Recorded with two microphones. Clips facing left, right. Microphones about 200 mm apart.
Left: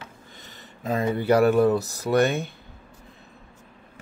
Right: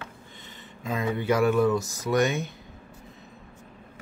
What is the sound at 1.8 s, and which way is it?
Speech, 65° left (ahead or behind).